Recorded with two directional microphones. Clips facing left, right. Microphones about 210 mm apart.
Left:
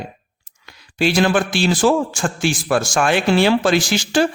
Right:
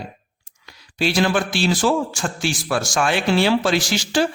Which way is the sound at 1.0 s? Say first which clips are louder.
Left 3 dB; 50° left (ahead or behind).